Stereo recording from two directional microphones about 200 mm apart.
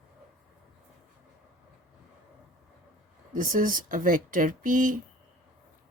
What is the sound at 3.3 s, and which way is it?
Speech, 40° right (ahead or behind).